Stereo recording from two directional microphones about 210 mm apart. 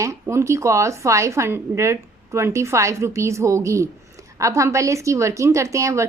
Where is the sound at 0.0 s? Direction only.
15° right (ahead or behind).